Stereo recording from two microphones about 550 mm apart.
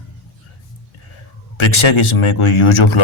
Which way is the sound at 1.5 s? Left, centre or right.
Left.